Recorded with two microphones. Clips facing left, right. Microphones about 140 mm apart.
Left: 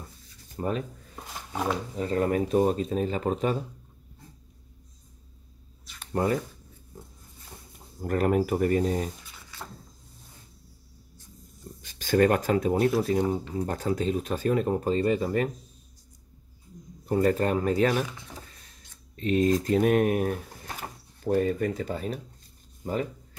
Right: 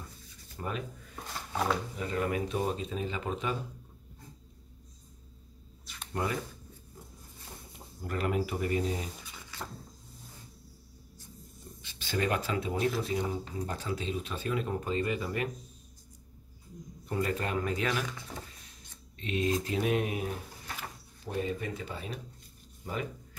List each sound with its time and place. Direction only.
0.6 s speech: 35° left (ahead or behind)
2.0 s speech: 35° left (ahead or behind)
6.2 s speech: 40° left (ahead or behind)
8.0 s speech: 45° left (ahead or behind)
11.8 s speech: 45° left (ahead or behind)
17.0 s speech: 40° left (ahead or behind)
19.1 s speech: 40° left (ahead or behind)